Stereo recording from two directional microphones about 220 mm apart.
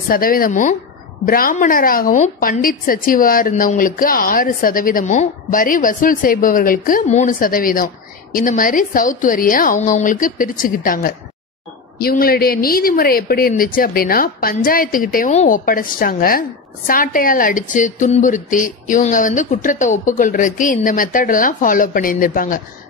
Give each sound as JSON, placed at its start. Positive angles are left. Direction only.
{"t": 0.1, "sound": "a woman's voice", "side_deg": 40}